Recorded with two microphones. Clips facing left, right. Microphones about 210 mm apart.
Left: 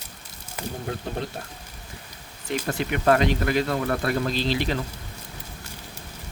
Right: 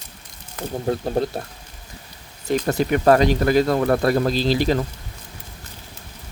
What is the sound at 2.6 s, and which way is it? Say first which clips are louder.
Speech: right 5 dB; 40° right (ahead or behind).